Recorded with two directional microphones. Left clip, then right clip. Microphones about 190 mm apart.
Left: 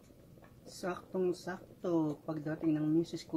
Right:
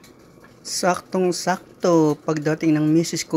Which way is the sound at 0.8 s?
35° right (ahead or behind).